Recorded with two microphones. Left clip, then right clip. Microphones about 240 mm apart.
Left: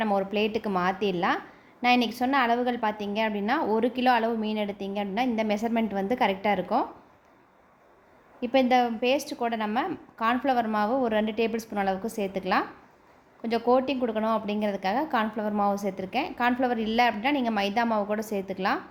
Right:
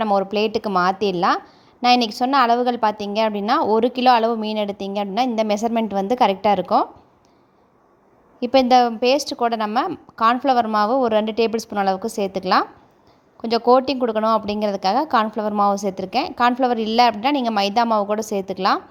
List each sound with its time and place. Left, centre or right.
0.0 s a woman's voice: right
8.4 s a woman's voice: right